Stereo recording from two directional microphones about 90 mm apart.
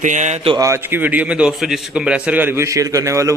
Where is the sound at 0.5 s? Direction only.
35° right (ahead or behind).